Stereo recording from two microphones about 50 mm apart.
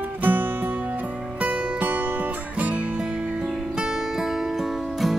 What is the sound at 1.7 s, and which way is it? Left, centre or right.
Music, right.